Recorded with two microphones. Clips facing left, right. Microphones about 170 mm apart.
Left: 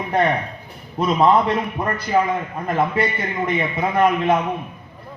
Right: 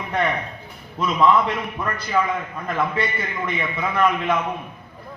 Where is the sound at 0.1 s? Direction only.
40° left (ahead or behind).